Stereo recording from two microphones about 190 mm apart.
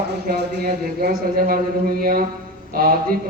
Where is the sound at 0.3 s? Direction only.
55° right (ahead or behind).